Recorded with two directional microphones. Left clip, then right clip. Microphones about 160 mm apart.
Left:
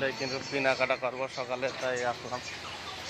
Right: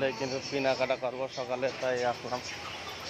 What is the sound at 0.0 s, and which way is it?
A man's voice, 20° right (ahead or behind).